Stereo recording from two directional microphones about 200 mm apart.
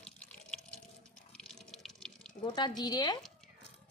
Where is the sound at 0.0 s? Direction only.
5° left (ahead or behind).